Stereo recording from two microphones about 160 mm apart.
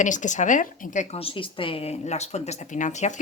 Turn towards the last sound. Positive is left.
turn(degrees=50)  # may be behind; listen again after turning